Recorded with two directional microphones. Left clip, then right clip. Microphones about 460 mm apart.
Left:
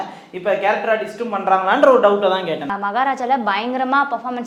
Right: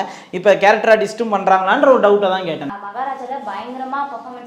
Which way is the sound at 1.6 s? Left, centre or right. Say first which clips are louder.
Left 2 dB; centre.